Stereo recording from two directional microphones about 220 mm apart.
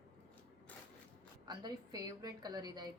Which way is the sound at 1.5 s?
20° right (ahead or behind).